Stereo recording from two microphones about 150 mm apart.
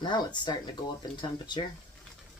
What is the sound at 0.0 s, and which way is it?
Speech, 30° left (ahead or behind).